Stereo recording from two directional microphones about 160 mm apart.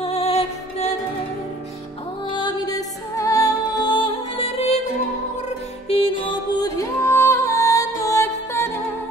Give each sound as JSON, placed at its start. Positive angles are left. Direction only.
{"t": 0.0, "sound": "music", "side_deg": 40}
{"t": 2.2, "sound": "music", "side_deg": 30}
{"t": 5.9, "sound": "music", "side_deg": 35}
{"t": 6.6, "sound": "music", "side_deg": 20}